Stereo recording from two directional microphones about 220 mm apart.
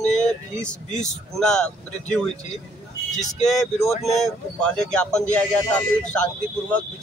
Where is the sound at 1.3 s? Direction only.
5° left (ahead or behind).